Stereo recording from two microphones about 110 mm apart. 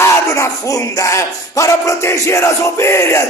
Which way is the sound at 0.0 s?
25° left (ahead or behind).